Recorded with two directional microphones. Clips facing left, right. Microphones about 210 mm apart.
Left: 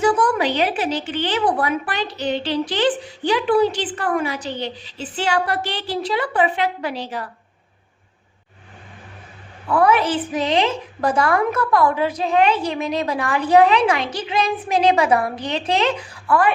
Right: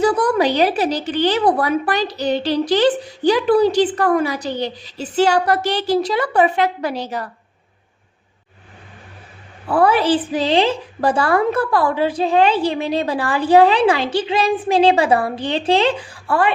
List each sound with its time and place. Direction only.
0.0 s a woman's voice: 35° right (ahead or behind)
9.6 s a woman's voice: 30° right (ahead or behind)